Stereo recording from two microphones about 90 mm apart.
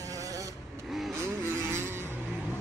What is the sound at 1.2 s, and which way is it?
Vehicle, 30° right (ahead or behind).